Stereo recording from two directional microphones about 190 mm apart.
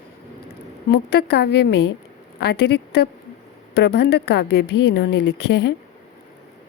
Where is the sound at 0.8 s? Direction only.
55° left (ahead or behind).